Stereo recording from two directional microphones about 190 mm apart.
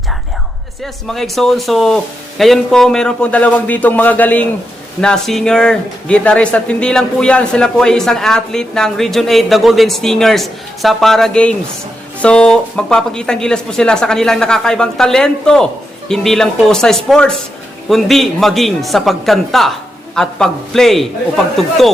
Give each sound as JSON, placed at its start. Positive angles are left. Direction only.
{"t": 1.0, "sound": "a man's voice", "side_deg": 0}